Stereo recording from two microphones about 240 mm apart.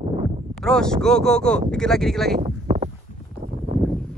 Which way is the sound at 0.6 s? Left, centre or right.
Centre.